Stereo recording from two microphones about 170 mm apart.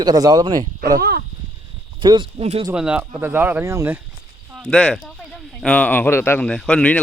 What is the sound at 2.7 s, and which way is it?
Speech, 5° right (ahead or behind).